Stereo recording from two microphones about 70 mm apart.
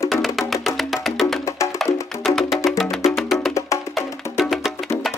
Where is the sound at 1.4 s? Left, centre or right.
Left.